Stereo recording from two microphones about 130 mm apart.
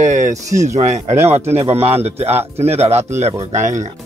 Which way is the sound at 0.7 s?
55° right (ahead or behind).